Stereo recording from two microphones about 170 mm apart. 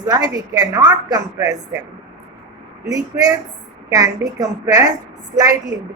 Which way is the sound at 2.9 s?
20° right (ahead or behind).